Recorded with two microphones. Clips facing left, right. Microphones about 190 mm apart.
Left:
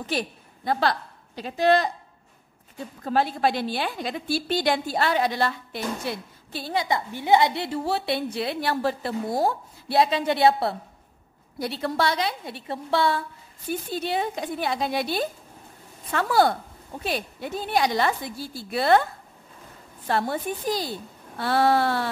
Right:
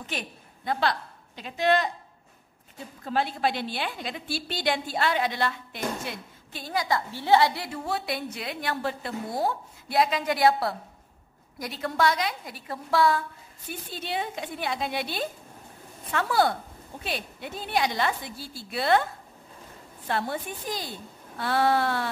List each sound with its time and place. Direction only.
0.0 s a woman's voice: 35° left (ahead or behind)
3.1 s a woman's voice: 45° left (ahead or behind); by 13.2 s 25° left (ahead or behind)
13.7 s a woman's voice: 40° left (ahead or behind)
20.1 s a woman's voice: 40° left (ahead or behind)